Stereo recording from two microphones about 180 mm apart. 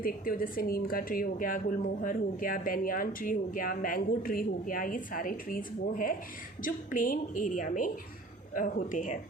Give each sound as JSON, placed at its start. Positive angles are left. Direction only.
{"t": 0.0, "sound": "speech", "side_deg": 50}